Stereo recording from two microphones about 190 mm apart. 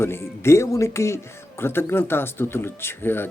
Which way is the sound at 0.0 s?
10° left (ahead or behind).